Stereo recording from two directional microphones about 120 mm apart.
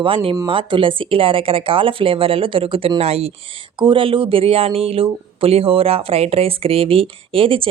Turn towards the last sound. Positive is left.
turn(degrees=-50)  # may be behind; listen again after turning